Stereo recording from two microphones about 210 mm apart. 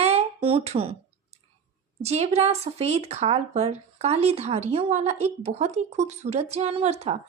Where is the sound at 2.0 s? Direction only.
30° right (ahead or behind).